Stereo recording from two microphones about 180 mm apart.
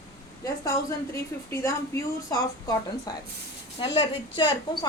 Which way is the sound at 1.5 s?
15° left (ahead or behind).